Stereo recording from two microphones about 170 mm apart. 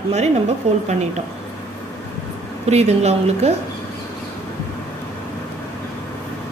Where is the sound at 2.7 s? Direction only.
40° right (ahead or behind).